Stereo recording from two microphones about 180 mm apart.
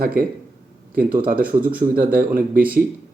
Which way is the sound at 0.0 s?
55° right (ahead or behind).